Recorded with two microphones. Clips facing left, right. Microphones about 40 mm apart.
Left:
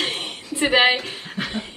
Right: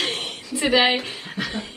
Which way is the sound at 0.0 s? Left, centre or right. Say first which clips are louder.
Even; left.